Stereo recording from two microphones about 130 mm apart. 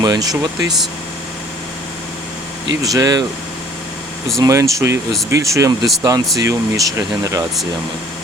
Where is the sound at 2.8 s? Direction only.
30° right (ahead or behind).